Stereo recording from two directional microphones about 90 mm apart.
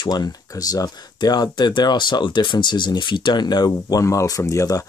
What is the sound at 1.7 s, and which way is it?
Speech, 60° left (ahead or behind).